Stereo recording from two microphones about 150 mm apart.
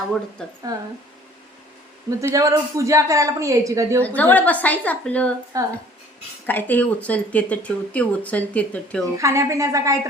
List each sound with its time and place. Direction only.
0.4 s speech: 5° left (ahead or behind)
2.0 s a woman's voice: 20° right (ahead or behind)
4.0 s speech: 10° left (ahead or behind)
5.5 s a woman's voice: 25° right (ahead or behind)
6.4 s speech: 10° left (ahead or behind)
9.1 s a woman's voice: 20° right (ahead or behind)